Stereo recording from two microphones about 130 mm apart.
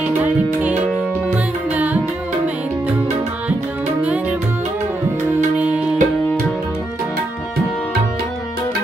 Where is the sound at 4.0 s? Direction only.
10° right (ahead or behind).